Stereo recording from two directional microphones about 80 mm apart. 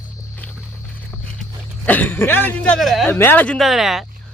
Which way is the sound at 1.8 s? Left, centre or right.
Left.